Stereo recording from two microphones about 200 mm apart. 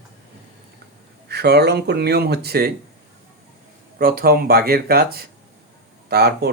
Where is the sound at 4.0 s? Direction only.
50° right (ahead or behind).